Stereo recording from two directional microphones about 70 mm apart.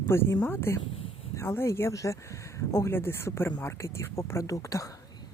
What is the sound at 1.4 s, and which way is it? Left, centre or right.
Speech, left.